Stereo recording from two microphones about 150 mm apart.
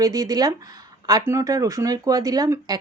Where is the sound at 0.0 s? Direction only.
25° right (ahead or behind).